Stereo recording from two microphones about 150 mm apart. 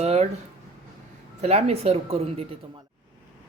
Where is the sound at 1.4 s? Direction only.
45° right (ahead or behind).